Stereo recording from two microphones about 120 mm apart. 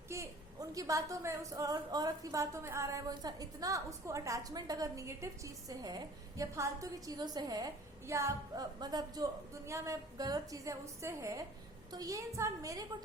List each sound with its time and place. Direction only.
0.1 s a woman's voice: 25° right (ahead or behind)
8.8 s a woman's voice: 35° right (ahead or behind)